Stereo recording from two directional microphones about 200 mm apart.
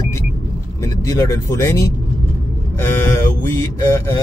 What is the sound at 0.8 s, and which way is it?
Mantra, 15° left (ahead or behind).